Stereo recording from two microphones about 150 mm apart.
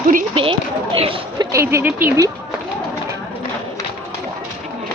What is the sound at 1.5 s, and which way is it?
Speech, 20° right (ahead or behind).